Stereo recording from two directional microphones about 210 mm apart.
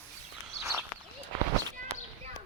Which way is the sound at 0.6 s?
15° right (ahead or behind).